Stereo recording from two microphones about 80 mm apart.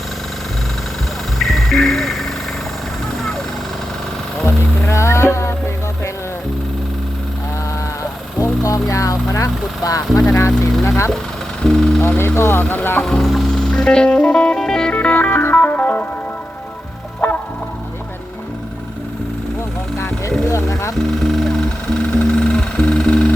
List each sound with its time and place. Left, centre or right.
1.4 s music: centre
4.4 s music: left
8.4 s vehicle: left
10.2 s speech: left
11.6 s music: centre
12.0 s speech: left
13.0 s music: centre
17.2 s fowl: left
20.5 s music: left
20.9 s music: centre
22.3 s a sound: centre